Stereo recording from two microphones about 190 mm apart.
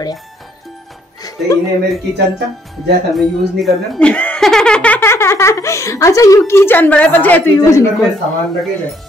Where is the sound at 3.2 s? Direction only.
Centre (ahead or behind).